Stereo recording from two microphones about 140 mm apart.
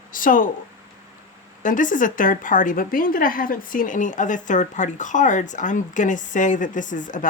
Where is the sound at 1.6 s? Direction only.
70° left (ahead or behind).